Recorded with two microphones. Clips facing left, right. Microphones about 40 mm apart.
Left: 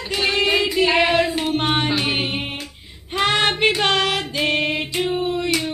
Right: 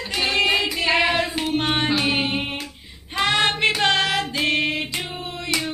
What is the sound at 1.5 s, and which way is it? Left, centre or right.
Music, centre.